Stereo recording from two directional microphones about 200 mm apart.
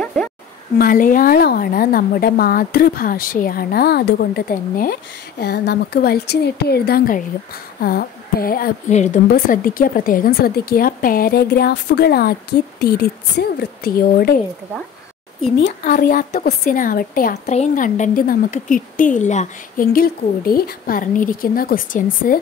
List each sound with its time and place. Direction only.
0.0 s a sound: 5° left (ahead or behind)
0.7 s speech: 45° left (ahead or behind)
15.8 s speech: 45° left (ahead or behind)